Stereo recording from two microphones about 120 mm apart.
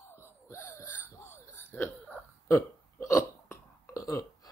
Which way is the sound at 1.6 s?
15° left (ahead or behind).